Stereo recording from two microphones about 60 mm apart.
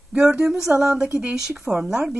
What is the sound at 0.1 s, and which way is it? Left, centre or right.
A woman's voice, centre.